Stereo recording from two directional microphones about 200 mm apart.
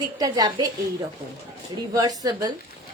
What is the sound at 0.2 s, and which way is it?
Speech, 20° right (ahead or behind).